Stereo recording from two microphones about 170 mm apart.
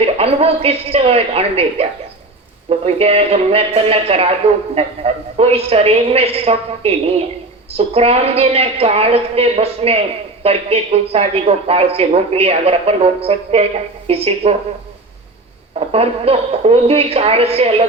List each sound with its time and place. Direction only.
0.0 s a man's voice: 35° right (ahead or behind)
15.7 s a man's voice: 35° right (ahead or behind)